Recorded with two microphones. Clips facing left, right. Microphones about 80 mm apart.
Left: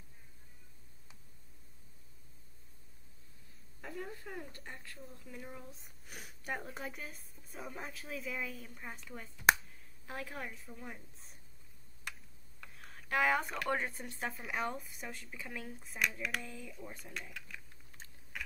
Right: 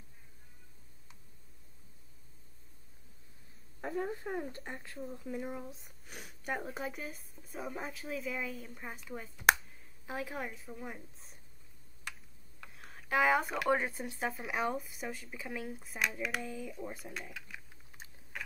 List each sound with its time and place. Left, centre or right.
3.8 s speech: right
5.7 s a woman's voice: centre
12.0 s speech: centre
16.8 s typing: centre